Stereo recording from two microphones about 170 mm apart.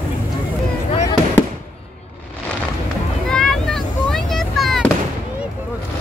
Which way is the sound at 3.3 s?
5° left (ahead or behind).